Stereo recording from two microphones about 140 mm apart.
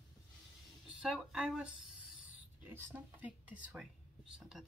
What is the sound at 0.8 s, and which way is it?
Speech, 5° right (ahead or behind).